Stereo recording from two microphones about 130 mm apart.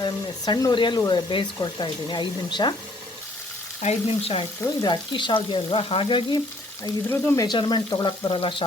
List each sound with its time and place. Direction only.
0.0 s frying: 30° left (ahead or behind)
3.8 s frying: 50° left (ahead or behind)
4.8 s frying: 35° left (ahead or behind)
7.1 s speech: 20° left (ahead or behind)
7.4 s frying: 35° left (ahead or behind)